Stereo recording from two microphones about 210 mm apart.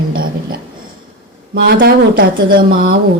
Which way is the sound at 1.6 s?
45° right (ahead or behind).